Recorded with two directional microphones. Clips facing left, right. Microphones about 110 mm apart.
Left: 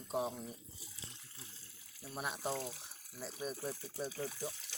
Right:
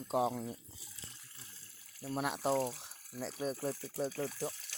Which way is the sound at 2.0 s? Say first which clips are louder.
Right 6 dB; 75° right (ahead or behind).